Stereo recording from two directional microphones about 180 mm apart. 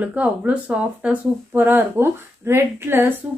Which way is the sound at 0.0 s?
10° right (ahead or behind).